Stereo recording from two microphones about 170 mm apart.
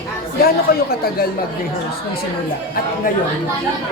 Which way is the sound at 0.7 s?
60° left (ahead or behind).